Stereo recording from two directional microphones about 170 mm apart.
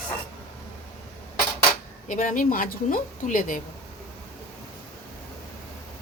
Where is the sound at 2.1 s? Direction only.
50° left (ahead or behind).